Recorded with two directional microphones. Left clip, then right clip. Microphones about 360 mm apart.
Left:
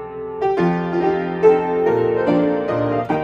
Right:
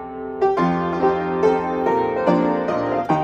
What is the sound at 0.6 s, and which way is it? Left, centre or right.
Music, right.